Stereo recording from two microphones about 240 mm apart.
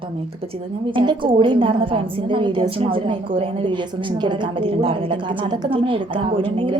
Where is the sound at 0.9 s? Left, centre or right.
Centre.